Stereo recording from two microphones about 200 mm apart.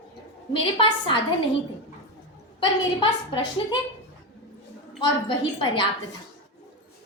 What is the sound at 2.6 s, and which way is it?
A woman's voice, 25° left (ahead or behind).